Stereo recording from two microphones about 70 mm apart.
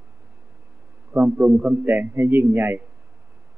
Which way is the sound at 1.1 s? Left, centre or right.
Right.